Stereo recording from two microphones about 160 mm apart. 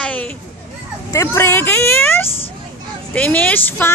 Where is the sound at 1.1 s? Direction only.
15° left (ahead or behind).